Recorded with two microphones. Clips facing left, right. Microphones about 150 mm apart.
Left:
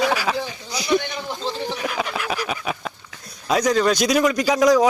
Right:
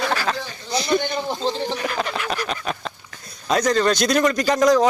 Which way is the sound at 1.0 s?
30° right (ahead or behind).